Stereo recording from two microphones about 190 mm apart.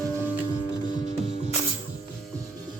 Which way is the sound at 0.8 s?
25° left (ahead or behind).